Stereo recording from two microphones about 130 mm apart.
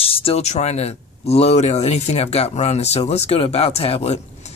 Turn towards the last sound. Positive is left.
turn(degrees=55)  # may be behind; listen again after turning